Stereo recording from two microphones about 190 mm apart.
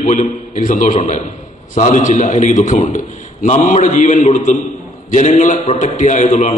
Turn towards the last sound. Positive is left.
turn(degrees=40)  # may be behind; listen again after turning